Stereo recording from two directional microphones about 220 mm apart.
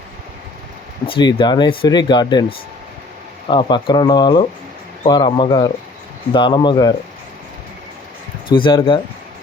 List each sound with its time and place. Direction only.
1.0 s speech: 25° left (ahead or behind)
8.4 s speech: 20° left (ahead or behind)